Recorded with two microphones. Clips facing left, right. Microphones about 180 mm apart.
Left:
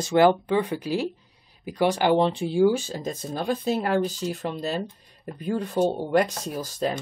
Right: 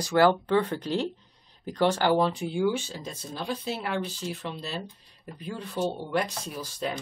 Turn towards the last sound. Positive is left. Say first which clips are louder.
# left 5 dB
turn(degrees=45)  # may be behind; listen again after turning